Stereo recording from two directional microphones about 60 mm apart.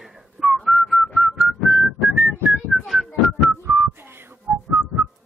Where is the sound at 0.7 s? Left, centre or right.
Centre.